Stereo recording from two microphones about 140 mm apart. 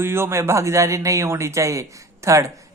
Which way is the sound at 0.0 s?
15° right (ahead or behind).